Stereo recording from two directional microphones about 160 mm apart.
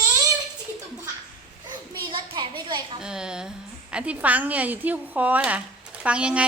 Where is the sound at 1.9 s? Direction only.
30° right (ahead or behind).